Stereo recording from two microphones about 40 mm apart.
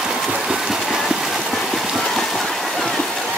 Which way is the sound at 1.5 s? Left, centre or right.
Centre.